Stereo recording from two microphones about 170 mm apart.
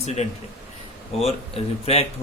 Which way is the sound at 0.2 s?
40° left (ahead or behind).